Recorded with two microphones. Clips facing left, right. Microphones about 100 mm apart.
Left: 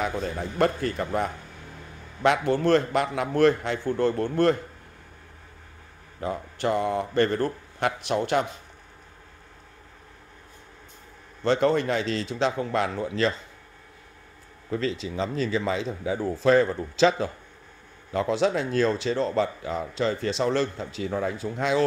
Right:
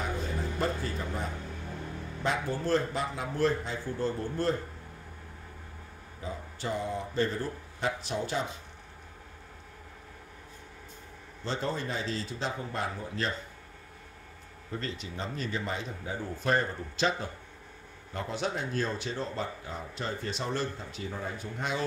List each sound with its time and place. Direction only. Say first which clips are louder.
0.6 s a man's voice: left 10 dB; 70° left (ahead or behind)
6.2 s speech: left 9 dB; 65° left (ahead or behind)
11.4 s a man's voice: left 11 dB; 70° left (ahead or behind); by 13.3 s 90° left
14.7 s speech: left 9 dB; 90° left